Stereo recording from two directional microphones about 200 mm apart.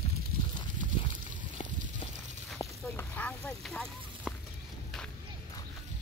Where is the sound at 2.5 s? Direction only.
15° left (ahead or behind).